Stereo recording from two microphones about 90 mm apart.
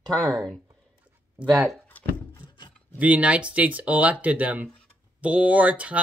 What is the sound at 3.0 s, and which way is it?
Speech, 15° right (ahead or behind).